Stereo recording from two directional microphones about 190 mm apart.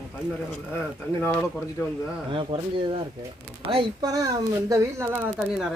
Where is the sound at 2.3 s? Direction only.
25° right (ahead or behind).